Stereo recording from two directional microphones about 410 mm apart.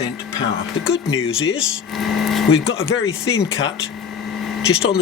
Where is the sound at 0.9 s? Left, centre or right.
Left.